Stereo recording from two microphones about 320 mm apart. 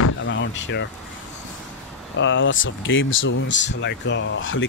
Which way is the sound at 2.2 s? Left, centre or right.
Left.